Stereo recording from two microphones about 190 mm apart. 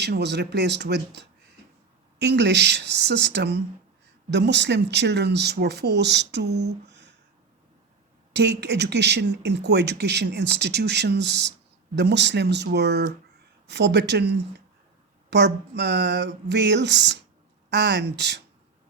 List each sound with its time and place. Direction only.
0.0 s speech: 60° right (ahead or behind)
8.3 s speech: 65° right (ahead or behind)